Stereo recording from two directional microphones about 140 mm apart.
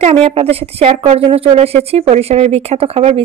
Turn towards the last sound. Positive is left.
turn(degrees=-45)  # may be behind; listen again after turning